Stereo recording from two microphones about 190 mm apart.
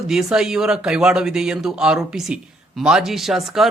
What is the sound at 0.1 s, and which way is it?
Speech, centre (ahead or behind).